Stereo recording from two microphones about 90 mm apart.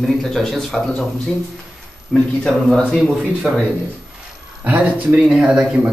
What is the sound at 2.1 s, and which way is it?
Speech, 10° left (ahead or behind).